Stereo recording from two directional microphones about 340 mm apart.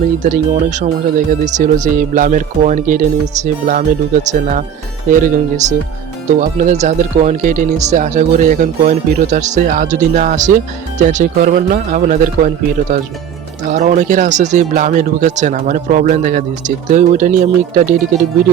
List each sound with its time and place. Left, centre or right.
0.2 s speech: right